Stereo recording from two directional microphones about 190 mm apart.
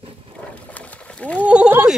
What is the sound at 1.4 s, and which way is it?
Speech, 5° right (ahead or behind).